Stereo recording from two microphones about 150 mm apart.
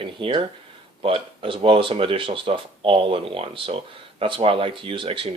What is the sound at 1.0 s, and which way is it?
Speech, 35° right (ahead or behind).